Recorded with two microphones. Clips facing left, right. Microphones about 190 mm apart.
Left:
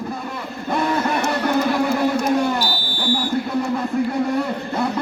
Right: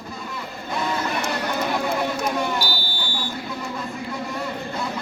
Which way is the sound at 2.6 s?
45° left (ahead or behind).